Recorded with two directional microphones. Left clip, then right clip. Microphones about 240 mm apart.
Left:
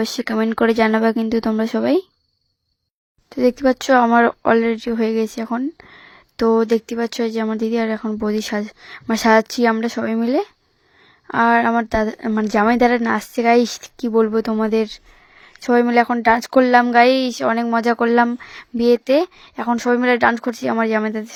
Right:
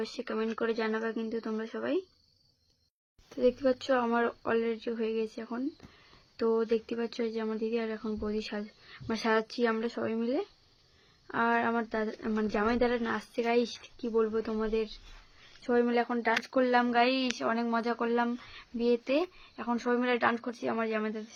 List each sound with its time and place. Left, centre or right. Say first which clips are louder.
0.0 s speech: left 13 dB; left
3.3 s speech: left 11 dB; left